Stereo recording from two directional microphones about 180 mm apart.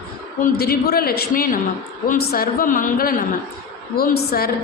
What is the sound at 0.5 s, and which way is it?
A woman's voice, 60° left (ahead or behind).